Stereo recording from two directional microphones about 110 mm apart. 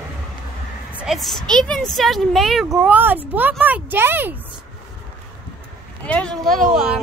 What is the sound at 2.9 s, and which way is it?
Speech, 15° right (ahead or behind).